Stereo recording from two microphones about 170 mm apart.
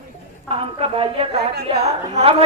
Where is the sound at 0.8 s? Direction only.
35° right (ahead or behind).